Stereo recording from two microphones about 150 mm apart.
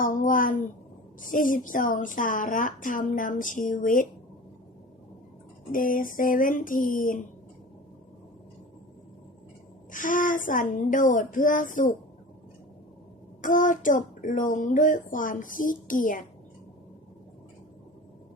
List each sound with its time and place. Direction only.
0.0 s speech: 60° left (ahead or behind)
5.7 s speech: 65° left (ahead or behind)
9.9 s speech: 60° left (ahead or behind)
13.4 s speech: 60° left (ahead or behind)